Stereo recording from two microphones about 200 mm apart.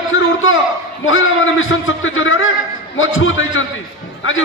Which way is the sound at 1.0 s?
80° left.